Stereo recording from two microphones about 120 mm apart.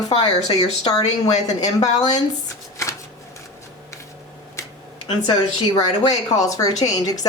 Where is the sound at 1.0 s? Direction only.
75° left (ahead or behind).